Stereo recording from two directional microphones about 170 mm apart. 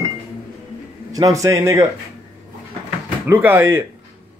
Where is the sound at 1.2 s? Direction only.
20° right (ahead or behind).